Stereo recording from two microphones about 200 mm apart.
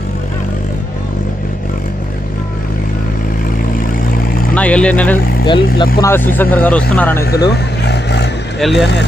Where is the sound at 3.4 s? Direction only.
45° left (ahead or behind).